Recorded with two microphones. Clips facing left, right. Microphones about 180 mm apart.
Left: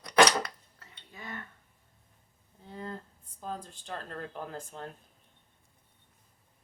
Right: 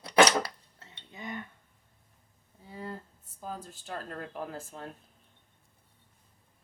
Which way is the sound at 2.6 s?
10° right (ahead or behind).